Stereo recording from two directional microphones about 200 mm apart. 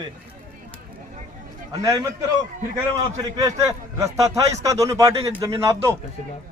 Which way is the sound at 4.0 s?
15° right (ahead or behind).